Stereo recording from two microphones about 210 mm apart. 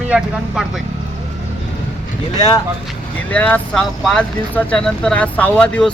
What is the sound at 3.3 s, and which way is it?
Speech, 5° left (ahead or behind).